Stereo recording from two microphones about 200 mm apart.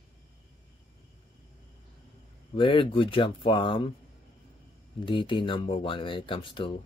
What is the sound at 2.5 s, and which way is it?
Speech, 25° left (ahead or behind).